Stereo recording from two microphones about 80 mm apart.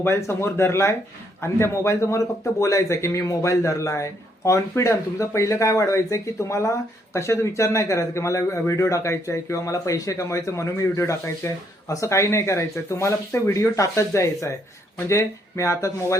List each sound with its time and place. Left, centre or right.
0.0 s speech: left